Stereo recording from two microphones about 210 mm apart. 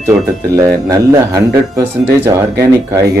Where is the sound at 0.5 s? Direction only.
15° right (ahead or behind).